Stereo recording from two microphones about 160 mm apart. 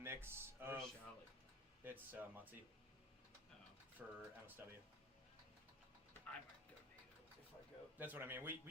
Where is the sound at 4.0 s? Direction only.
5° right (ahead or behind).